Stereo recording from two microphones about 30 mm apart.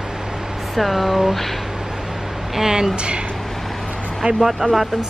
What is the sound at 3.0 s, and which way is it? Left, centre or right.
Speech, right.